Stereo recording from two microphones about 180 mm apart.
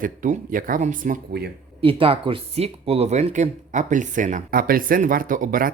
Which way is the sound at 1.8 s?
30° right (ahead or behind).